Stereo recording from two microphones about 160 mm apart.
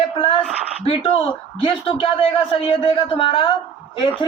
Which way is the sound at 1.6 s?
35° left (ahead or behind).